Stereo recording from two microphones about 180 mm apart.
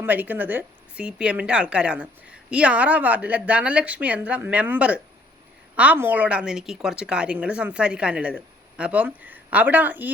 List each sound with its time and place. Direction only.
0.0 s a woman's voice: 10° right (ahead or behind)